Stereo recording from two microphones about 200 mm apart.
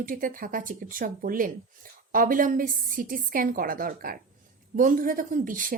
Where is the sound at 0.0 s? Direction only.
45° right (ahead or behind).